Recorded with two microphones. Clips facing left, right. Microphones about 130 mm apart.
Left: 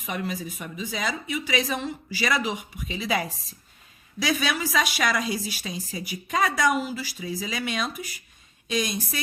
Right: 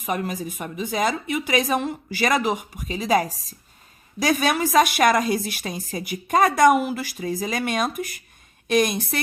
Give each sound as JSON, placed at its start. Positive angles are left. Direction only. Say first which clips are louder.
{"t": 0.0, "sound": "a woman's voice", "louder": "right 4 dB", "side_deg": -45}